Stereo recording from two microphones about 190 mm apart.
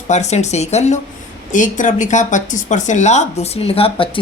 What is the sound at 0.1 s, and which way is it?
Speech, 35° left (ahead or behind).